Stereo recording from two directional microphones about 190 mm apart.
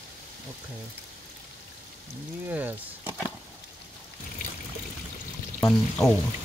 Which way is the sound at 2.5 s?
10° right (ahead or behind).